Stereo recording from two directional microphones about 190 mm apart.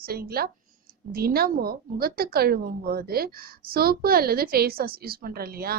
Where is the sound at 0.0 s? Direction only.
50° right (ahead or behind).